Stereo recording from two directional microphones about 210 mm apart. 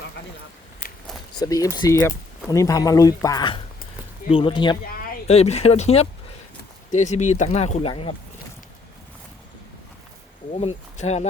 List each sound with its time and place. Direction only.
1.4 s speech: 15° left (ahead or behind)
10.5 s speech: 30° left (ahead or behind)